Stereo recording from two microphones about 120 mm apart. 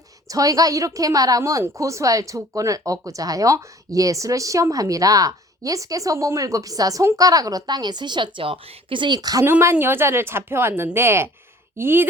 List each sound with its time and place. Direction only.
0.3 s speech: 30° right (ahead or behind)
9.5 s speech: 20° right (ahead or behind)